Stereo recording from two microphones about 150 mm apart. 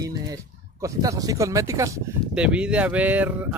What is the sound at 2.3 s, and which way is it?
Speech, 5° right (ahead or behind).